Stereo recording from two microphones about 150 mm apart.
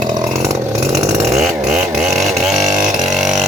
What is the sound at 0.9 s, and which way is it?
Chainsaw, 20° right (ahead or behind).